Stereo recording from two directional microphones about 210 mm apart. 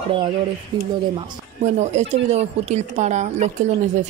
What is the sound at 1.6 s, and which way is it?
Speech, 35° right (ahead or behind).